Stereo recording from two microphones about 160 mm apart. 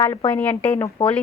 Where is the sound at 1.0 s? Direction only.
30° left (ahead or behind).